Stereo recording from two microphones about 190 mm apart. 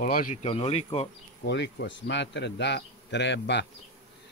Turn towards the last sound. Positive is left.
turn(degrees=65)  # may be behind; listen again after turning